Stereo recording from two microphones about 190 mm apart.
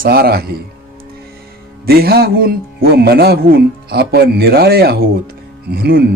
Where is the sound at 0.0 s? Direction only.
55° right (ahead or behind).